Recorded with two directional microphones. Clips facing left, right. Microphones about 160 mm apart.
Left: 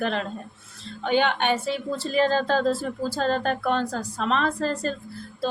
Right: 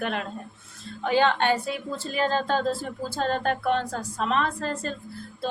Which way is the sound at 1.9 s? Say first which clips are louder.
Left 4 dB; 35° left (ahead or behind).